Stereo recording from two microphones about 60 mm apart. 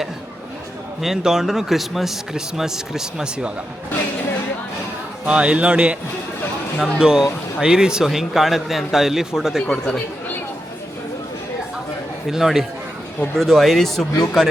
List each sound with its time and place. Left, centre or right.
1.0 s speech: centre
5.2 s speech: centre
9.6 s speech: centre
12.3 s speech: centre